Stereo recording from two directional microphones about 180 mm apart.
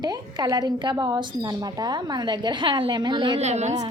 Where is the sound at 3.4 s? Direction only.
40° right (ahead or behind).